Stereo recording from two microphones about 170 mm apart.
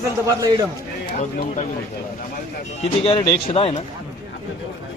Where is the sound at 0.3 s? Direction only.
20° right (ahead or behind).